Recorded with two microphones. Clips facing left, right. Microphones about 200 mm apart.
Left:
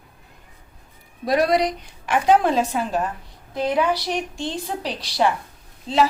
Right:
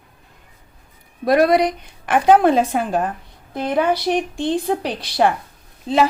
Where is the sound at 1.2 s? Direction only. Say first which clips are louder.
Right 4 dB; 55° right (ahead or behind).